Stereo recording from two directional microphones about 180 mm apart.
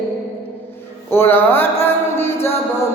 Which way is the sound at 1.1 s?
10° left (ahead or behind).